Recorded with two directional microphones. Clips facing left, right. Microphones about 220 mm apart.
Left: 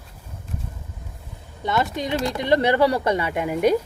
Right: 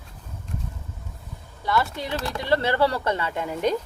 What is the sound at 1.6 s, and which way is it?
Speech, 20° left (ahead or behind).